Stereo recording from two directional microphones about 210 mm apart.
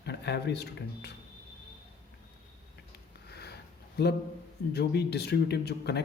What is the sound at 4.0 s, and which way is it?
Speech, 50° left (ahead or behind).